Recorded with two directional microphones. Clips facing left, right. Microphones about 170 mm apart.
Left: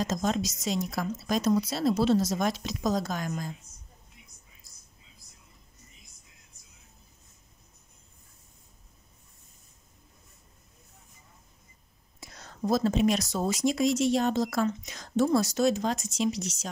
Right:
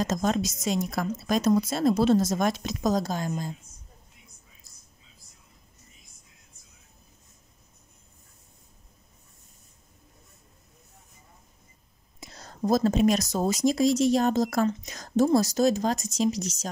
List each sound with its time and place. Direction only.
0.0 s a woman's voice: 50° right (ahead or behind)
3.1 s a woman's voice: 30° right (ahead or behind)
12.2 s speech: 30° right (ahead or behind)